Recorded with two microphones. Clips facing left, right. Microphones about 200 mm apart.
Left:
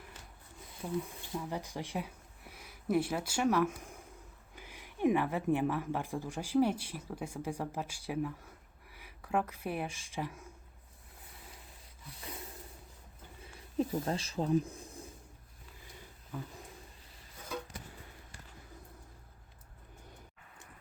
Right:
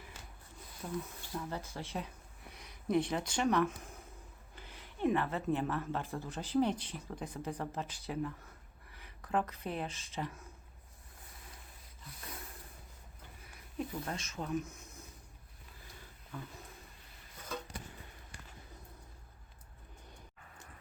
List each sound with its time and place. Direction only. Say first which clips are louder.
0.8 s speech: left 4 dB; 15° left (ahead or behind)
13.4 s a sound: left 7 dB; 30° left (ahead or behind)
14.0 s speech: left 6 dB; 30° left (ahead or behind)
16.3 s speech: left 3 dB; 10° left (ahead or behind)